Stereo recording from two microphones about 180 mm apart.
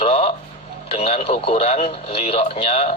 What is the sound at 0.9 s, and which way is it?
Speech, 35° left (ahead or behind).